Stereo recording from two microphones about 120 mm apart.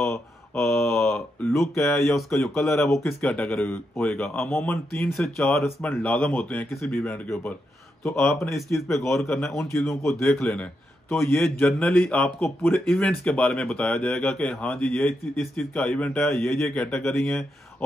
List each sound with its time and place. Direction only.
0.0 s speech: 20° left (ahead or behind)
1.6 s speech: centre (ahead or behind)
2.9 s a man's voice: 20° left (ahead or behind)
8.5 s speech: centre (ahead or behind)
8.8 s a man's voice: 25° left (ahead or behind)
10.3 s speech: 5° left (ahead or behind)
11.1 s a man's voice: 20° left (ahead or behind)
11.6 s speech: 5° left (ahead or behind)